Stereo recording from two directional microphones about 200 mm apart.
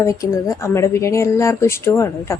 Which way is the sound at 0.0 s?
15° left (ahead or behind).